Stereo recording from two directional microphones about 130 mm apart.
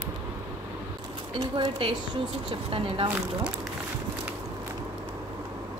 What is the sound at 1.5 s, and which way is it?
Speech, 40° right (ahead or behind).